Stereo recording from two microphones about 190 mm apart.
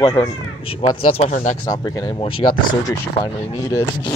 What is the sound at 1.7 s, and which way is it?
Speech, 20° left (ahead or behind).